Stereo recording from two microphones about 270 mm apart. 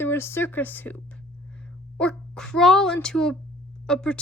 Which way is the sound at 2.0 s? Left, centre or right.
Centre.